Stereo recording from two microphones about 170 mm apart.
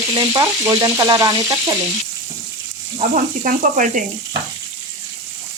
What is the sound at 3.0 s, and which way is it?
Speech, 50° right (ahead or behind).